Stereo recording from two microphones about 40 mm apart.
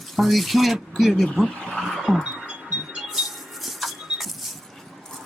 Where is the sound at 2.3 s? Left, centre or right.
Right.